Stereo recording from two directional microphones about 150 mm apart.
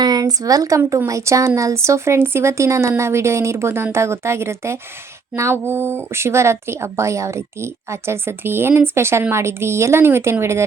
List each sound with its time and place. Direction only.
0.0 s a woman's voice: 25° right (ahead or behind)